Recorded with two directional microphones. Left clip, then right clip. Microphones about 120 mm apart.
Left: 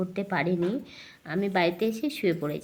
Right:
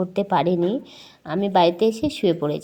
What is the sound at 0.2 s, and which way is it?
Speech, 40° right (ahead or behind).